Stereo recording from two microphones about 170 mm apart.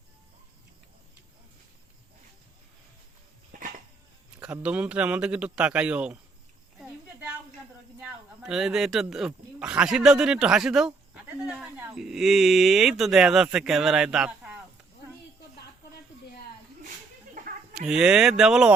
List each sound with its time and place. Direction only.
3.5 s dog: 50° right (ahead or behind)
4.4 s a man's voice: 10° right (ahead or behind)
8.0 s speech: 5° right (ahead or behind)
17.7 s speech: 5° right (ahead or behind)